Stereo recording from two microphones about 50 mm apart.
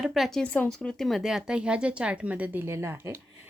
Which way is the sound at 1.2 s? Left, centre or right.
Centre.